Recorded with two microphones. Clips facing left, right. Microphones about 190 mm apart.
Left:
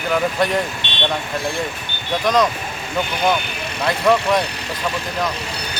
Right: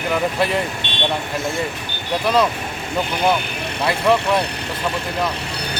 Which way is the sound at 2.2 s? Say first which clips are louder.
Left 1 dB; 5° right (ahead or behind).